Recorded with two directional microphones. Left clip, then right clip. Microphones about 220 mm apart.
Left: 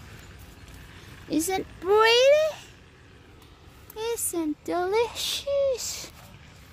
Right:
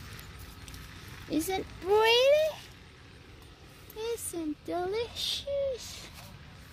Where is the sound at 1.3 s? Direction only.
25° left (ahead or behind).